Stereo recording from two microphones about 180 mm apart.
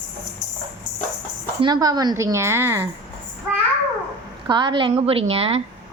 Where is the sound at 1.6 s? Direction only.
20° right (ahead or behind).